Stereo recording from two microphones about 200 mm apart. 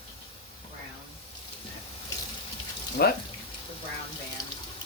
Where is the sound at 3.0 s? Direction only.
55° left (ahead or behind).